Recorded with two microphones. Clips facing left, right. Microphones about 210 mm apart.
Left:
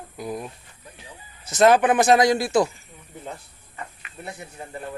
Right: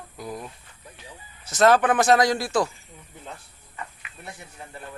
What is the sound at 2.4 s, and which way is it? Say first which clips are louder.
Speech: left 4 dB; 25° left (ahead or behind).